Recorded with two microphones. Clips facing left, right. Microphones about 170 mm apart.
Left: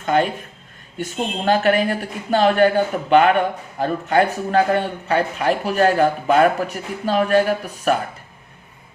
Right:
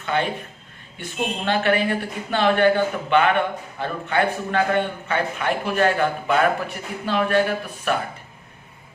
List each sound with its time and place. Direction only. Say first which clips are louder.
0.0 s a man's voice: left 5 dB; 40° left (ahead or behind)